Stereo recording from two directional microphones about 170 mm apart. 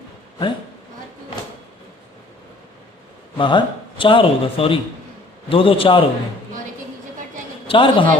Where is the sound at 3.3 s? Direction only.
30° left (ahead or behind).